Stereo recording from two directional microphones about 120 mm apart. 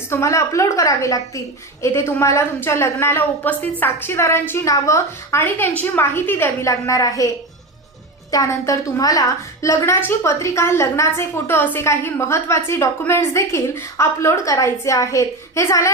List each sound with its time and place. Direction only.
0.1 s a woman's voice: 25° left (ahead or behind)
8.3 s a woman's voice: 25° left (ahead or behind)